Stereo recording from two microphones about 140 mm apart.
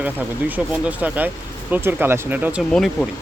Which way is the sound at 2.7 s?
5° left (ahead or behind).